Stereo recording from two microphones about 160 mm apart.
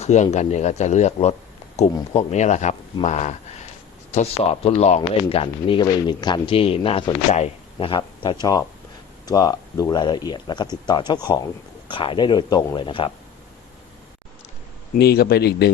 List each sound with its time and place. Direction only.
0.0 s speech: 45° left (ahead or behind)
14.9 s speech: 85° left